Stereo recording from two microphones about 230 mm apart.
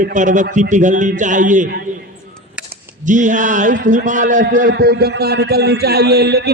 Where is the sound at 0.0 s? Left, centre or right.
Right.